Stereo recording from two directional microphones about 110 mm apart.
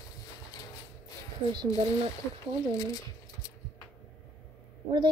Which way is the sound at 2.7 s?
35° left (ahead or behind).